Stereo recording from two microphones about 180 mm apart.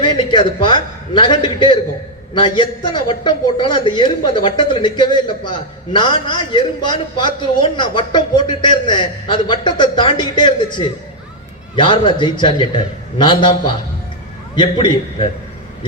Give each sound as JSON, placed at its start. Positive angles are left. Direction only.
{"t": 0.0, "sound": "a man's voice", "side_deg": 25}
{"t": 14.5, "sound": "a man's voice", "side_deg": 25}